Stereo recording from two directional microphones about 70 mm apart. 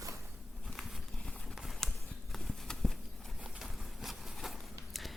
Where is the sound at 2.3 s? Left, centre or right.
Centre.